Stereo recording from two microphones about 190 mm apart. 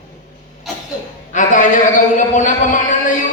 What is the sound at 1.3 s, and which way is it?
A man's voice, 40° left (ahead or behind).